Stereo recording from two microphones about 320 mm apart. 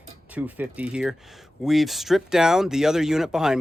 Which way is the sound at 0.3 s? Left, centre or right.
Centre.